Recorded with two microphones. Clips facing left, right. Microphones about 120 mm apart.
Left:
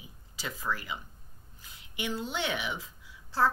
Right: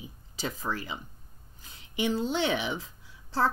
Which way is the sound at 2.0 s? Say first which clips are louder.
Right 6 dB; 30° right (ahead or behind).